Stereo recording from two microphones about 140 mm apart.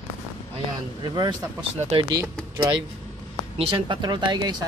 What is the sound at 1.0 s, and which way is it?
Speech, 30° right (ahead or behind).